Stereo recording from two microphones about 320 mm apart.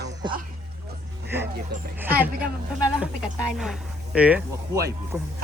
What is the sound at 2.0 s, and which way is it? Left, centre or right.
Speech, centre.